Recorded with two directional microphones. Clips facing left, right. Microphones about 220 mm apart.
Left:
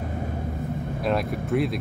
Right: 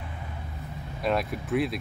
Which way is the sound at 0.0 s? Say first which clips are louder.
Left 11 dB; 45° left (ahead or behind).